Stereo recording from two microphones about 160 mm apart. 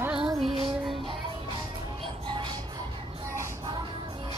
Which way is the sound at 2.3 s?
30° right (ahead or behind).